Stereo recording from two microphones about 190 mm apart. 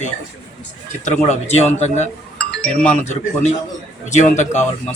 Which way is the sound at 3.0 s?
40° left (ahead or behind).